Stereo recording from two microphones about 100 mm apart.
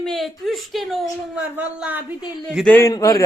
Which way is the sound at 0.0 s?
Centre (ahead or behind).